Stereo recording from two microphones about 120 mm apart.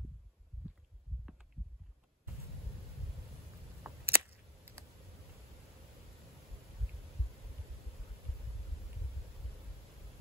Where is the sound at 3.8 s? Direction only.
15° right (ahead or behind).